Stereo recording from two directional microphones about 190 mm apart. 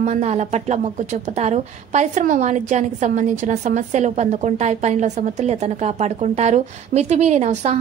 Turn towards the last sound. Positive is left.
turn(degrees=-35)  # may be behind; listen again after turning